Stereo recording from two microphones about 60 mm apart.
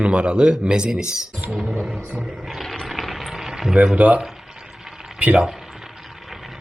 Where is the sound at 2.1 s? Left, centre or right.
Centre.